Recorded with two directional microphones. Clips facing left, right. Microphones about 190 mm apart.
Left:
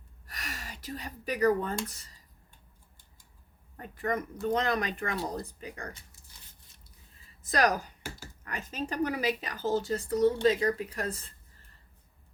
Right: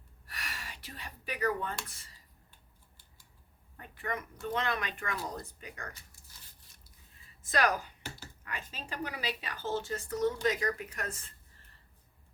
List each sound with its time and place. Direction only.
0.3 s speech: 40° left (ahead or behind)
3.8 s a woman's voice: 40° left (ahead or behind)
7.4 s a woman's voice: 40° left (ahead or behind)